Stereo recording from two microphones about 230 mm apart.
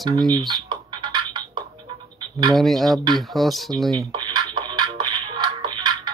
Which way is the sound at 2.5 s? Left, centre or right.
Centre.